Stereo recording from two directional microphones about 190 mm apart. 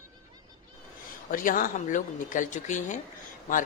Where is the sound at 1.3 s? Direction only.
45° left (ahead or behind).